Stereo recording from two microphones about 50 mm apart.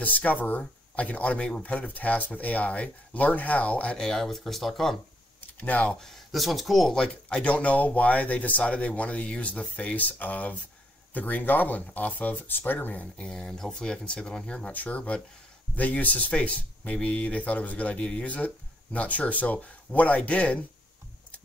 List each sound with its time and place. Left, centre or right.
0.0 s speech: left
4.0 s speech: centre
5.6 s speech: left
5.9 s speech: centre
6.9 s speech: centre
7.4 s speech: left
13.0 s speech: centre